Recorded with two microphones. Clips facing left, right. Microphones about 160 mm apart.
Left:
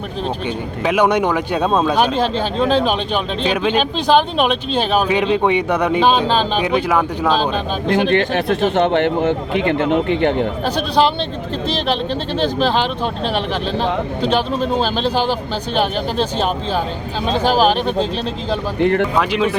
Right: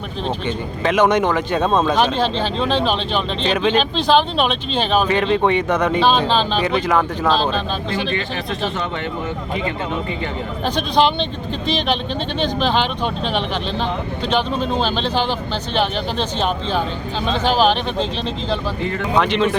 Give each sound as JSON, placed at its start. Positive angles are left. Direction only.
{"t": 0.9, "sound": "speech", "side_deg": 10}
{"t": 7.9, "sound": "speech", "side_deg": 60}
{"t": 13.2, "sound": "speech", "side_deg": 5}
{"t": 17.2, "sound": "speech", "side_deg": 40}
{"t": 17.6, "sound": "speech", "side_deg": 5}
{"t": 18.8, "sound": "speech", "side_deg": 65}
{"t": 19.1, "sound": "speech", "side_deg": 5}